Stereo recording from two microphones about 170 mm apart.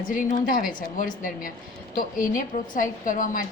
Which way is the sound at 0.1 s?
50° left (ahead or behind).